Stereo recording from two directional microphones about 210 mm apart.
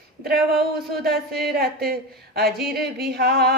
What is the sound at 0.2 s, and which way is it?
Speech, 45° right (ahead or behind).